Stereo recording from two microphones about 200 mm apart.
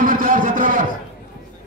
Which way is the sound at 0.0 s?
45° right (ahead or behind).